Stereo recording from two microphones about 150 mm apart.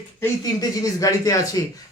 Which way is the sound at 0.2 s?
20° left (ahead or behind).